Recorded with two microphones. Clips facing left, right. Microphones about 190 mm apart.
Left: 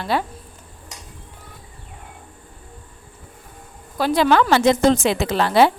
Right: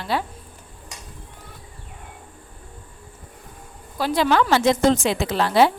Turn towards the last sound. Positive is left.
turn(degrees=65)  # may be behind; listen again after turning